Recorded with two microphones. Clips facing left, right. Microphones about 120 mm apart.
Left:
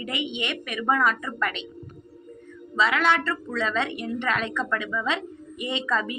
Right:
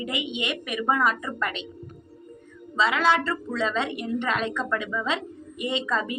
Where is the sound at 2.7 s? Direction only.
25° right (ahead or behind).